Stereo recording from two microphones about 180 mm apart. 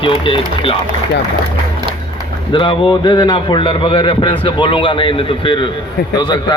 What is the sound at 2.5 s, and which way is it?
Speech, 25° left (ahead or behind).